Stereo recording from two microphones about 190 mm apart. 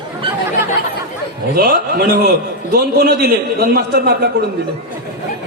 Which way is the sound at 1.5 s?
55° right (ahead or behind).